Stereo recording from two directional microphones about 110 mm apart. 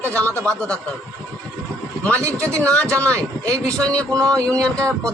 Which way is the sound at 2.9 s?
10° left (ahead or behind).